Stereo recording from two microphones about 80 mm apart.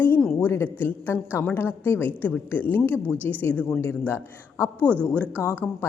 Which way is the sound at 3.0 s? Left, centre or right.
Right.